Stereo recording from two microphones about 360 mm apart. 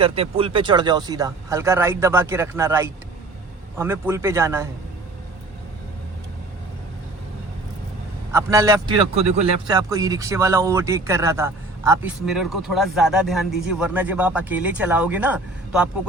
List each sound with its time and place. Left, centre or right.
0.0 s speech: centre
8.3 s speech: centre